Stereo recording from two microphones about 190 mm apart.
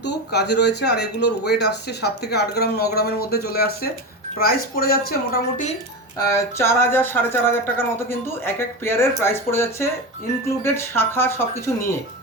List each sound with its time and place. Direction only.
0.3 s speech: 60° left (ahead or behind)
6.1 s speech: 15° left (ahead or behind)